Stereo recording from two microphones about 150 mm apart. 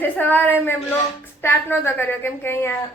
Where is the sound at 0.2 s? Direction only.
10° left (ahead or behind).